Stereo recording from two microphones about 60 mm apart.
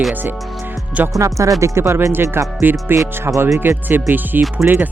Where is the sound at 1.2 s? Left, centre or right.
Right.